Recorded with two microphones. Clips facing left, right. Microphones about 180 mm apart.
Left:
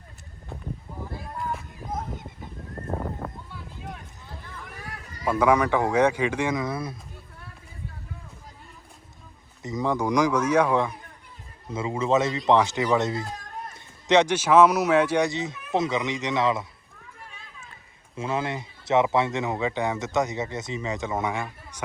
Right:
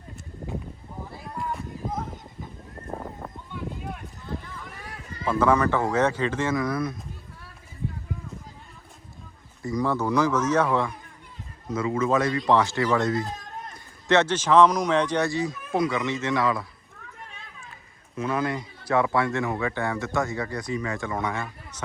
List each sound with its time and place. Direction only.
2.9 s a sound: centre (ahead or behind)
5.2 s speech: 10° left (ahead or behind)
9.6 s speech: 20° left (ahead or behind)
11.7 s speech: 25° left (ahead or behind)
18.2 s speech: 25° left (ahead or behind)